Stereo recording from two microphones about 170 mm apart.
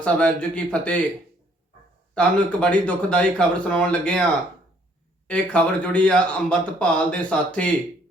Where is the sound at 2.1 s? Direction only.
5° left (ahead or behind).